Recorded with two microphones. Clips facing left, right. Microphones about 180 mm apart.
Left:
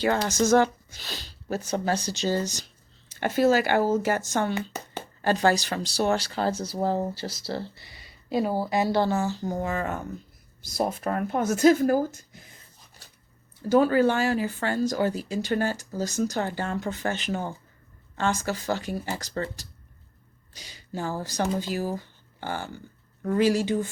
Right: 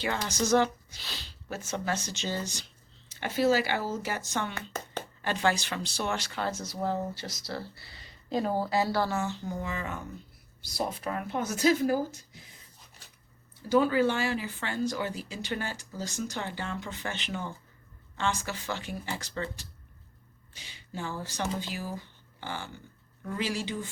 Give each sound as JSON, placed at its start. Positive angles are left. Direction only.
{"t": 0.2, "sound": "speech", "side_deg": 50}
{"t": 4.5, "sound": "a sound", "side_deg": 10}
{"t": 5.2, "sound": "speech", "side_deg": 40}
{"t": 7.9, "sound": "speech", "side_deg": 10}
{"t": 13.7, "sound": "speech", "side_deg": 45}